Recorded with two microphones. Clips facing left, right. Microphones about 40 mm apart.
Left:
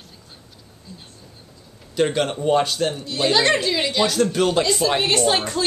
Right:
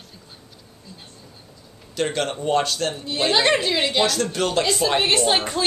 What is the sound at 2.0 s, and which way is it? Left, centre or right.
Speech, centre.